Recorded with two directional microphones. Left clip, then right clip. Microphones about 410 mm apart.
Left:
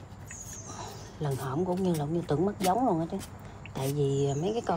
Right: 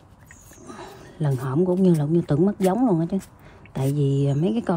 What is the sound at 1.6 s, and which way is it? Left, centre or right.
Speech, right.